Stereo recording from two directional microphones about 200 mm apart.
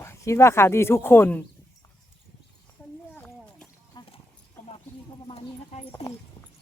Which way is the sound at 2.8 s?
5° left (ahead or behind).